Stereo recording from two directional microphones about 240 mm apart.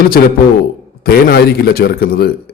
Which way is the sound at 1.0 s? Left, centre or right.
Left.